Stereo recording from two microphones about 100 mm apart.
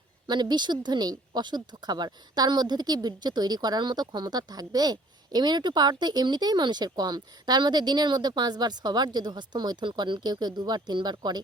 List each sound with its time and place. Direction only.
0.3 s a woman's voice: 45° right (ahead or behind)